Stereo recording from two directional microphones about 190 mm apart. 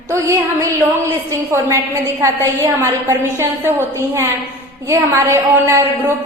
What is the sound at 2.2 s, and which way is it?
Speech, 15° right (ahead or behind).